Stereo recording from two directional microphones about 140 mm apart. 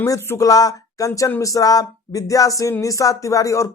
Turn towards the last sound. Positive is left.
turn(degrees=20)  # may be behind; listen again after turning